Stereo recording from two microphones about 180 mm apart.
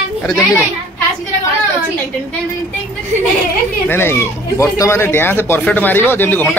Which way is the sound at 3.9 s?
15° left (ahead or behind).